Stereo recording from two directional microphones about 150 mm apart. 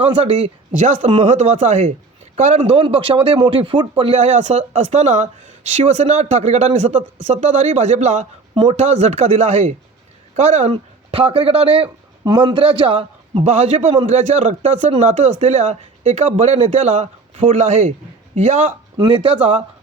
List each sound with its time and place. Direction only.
0.8 s a man's voice: 55° right (ahead or behind)
2.6 s a man's voice: 35° right (ahead or behind)
4.2 s speech: 50° right (ahead or behind)
10.7 s a man's voice: 35° right (ahead or behind)
18.9 s a man's voice: 35° right (ahead or behind)